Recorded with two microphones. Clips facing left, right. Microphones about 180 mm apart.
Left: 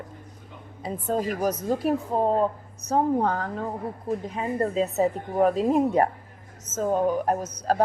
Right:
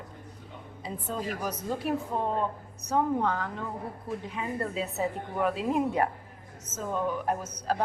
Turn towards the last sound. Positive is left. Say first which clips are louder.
# left 5 dB
turn(degrees=40)  # may be behind; listen again after turning